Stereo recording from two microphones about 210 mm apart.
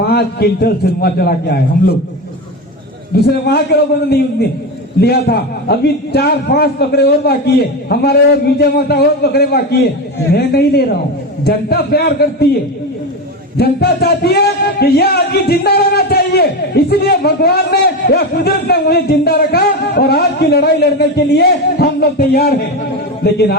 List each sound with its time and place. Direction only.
0.0 s a man's voice: 50° left (ahead or behind)
3.2 s a man's voice: 50° left (ahead or behind)
13.6 s a man's voice: 50° left (ahead or behind)